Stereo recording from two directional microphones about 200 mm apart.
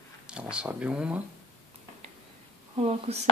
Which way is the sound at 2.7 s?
30° right (ahead or behind).